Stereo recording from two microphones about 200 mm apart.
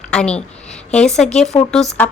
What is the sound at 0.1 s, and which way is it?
A woman's voice, 5° left (ahead or behind).